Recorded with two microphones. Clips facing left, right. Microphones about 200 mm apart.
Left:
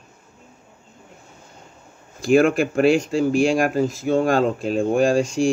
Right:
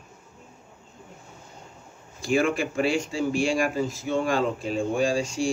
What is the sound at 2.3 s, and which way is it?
Speech, 55° left (ahead or behind).